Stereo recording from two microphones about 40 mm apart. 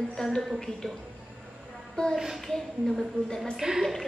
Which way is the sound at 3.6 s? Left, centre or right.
Right.